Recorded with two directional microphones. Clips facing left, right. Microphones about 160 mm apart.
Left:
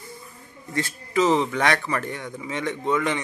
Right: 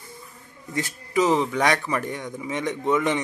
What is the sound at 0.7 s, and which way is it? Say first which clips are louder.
A man's voice: even; 15° right (ahead or behind).